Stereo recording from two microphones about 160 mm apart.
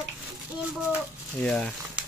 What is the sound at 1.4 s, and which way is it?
Speech, 5° left (ahead or behind).